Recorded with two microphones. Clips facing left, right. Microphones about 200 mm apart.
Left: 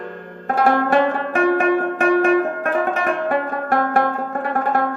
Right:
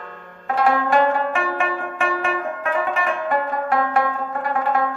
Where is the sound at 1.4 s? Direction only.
45° left (ahead or behind).